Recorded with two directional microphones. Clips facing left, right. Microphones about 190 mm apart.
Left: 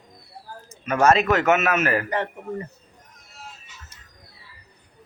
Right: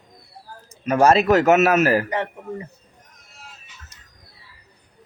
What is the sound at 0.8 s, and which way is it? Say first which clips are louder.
Speech: right 3 dB; 35° right (ahead or behind).